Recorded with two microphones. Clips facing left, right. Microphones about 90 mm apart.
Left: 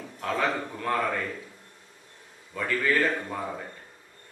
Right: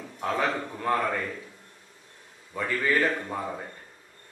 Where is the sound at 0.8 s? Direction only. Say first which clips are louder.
Right 2 dB; 15° right (ahead or behind).